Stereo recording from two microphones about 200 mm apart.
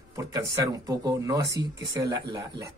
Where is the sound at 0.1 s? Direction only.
15° right (ahead or behind).